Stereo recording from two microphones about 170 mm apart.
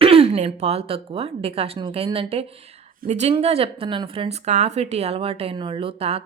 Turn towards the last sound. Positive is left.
turn(degrees=-35)  # may be behind; listen again after turning